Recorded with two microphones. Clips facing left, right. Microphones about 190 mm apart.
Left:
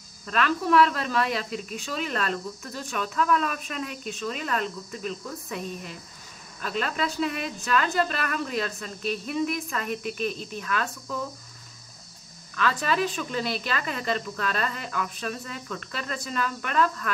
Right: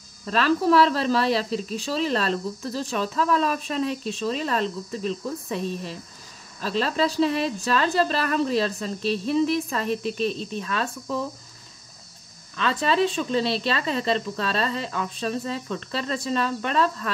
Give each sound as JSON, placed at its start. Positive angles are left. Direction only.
{"t": 0.3, "sound": "speech", "side_deg": -35}
{"t": 12.5, "sound": "speech", "side_deg": -25}